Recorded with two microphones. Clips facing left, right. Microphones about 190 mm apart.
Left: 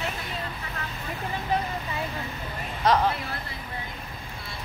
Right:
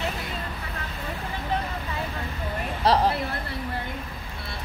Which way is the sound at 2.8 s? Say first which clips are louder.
Right 1 dB; 35° right (ahead or behind).